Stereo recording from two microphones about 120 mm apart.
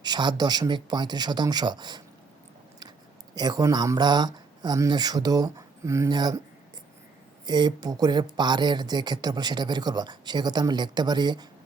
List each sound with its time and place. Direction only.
0.0 s speech: 40° right (ahead or behind)
3.3 s speech: 35° right (ahead or behind)
6.1 s speech: 35° right (ahead or behind)
7.4 s speech: 35° right (ahead or behind)